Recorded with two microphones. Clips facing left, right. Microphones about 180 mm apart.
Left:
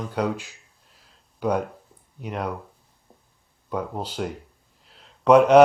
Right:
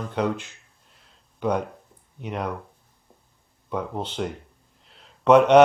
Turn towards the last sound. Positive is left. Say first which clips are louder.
# left 1 dB
turn(degrees=5)  # may be behind; listen again after turning